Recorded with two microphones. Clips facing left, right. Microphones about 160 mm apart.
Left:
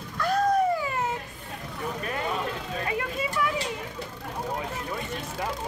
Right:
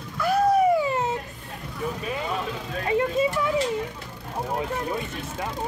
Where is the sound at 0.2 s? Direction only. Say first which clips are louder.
Right 3 dB; 5° right (ahead or behind).